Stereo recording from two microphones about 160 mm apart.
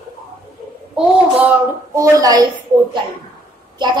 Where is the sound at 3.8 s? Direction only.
25° right (ahead or behind).